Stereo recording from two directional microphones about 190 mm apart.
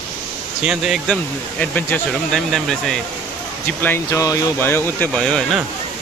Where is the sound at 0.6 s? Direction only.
5° right (ahead or behind).